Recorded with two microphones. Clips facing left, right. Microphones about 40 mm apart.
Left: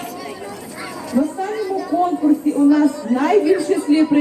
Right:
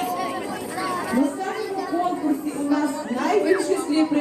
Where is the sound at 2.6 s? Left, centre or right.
Centre.